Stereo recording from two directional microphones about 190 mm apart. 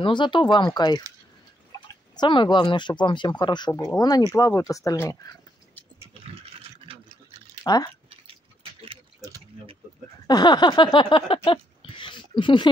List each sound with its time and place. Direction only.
0.0 s speech: 25° left (ahead or behind)
2.1 s speech: 25° left (ahead or behind)
7.6 s speech: 20° left (ahead or behind)
10.2 s a sound: 20° left (ahead or behind)